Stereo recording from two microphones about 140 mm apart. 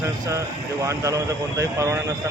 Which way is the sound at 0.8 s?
20° right (ahead or behind).